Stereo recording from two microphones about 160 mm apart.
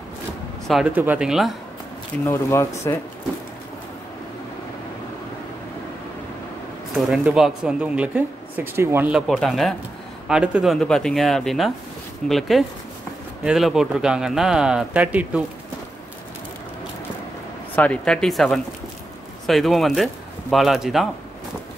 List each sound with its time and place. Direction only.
0.7 s speech: 5° right (ahead or behind)
2.2 s speech: 15° left (ahead or behind)
7.1 s speech: 5° right (ahead or behind)
9.3 s speech: centre (ahead or behind)
17.7 s speech: 5° left (ahead or behind)